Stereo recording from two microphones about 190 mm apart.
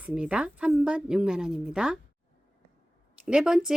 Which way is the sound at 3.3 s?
5° right (ahead or behind).